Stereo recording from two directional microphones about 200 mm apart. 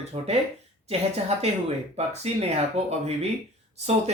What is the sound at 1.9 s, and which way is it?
Speech, 30° right (ahead or behind).